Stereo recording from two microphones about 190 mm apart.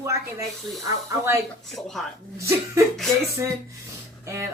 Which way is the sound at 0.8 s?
15° right (ahead or behind).